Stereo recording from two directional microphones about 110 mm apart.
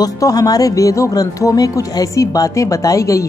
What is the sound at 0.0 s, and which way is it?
Speech, 35° left (ahead or behind).